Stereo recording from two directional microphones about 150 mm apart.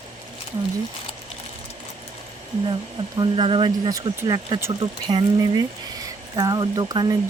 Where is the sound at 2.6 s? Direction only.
35° right (ahead or behind).